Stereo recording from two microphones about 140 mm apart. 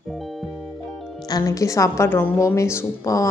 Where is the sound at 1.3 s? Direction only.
25° left (ahead or behind).